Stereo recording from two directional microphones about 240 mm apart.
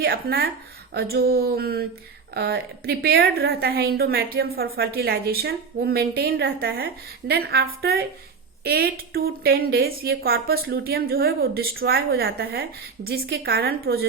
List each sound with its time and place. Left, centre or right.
0.0 s a woman's voice: right